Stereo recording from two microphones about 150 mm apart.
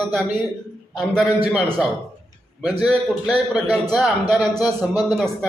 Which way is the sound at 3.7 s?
5° right (ahead or behind).